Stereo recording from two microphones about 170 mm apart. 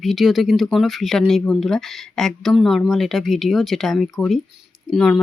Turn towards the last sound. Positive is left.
turn(degrees=5)  # may be behind; listen again after turning